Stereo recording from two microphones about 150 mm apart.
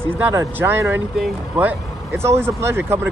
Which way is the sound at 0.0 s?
15° right (ahead or behind).